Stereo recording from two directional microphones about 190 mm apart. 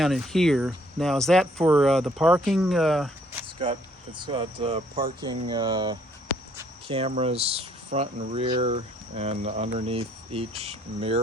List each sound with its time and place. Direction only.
0.0 s speech: centre (ahead or behind)
4.2 s speech: 25° right (ahead or behind)